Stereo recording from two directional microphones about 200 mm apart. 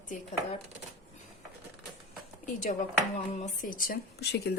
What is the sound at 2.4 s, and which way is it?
Speech, 40° left (ahead or behind).